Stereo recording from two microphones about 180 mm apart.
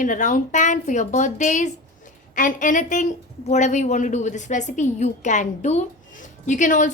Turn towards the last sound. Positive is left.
turn(degrees=45)  # may be behind; listen again after turning